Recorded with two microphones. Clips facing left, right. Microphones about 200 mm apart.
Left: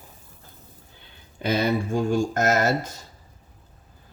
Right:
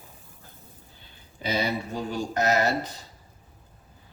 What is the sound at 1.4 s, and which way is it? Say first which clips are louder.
Speech: left 5 dB; 55° left (ahead or behind).